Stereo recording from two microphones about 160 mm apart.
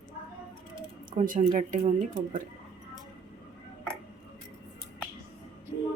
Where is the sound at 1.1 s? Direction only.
55° right (ahead or behind).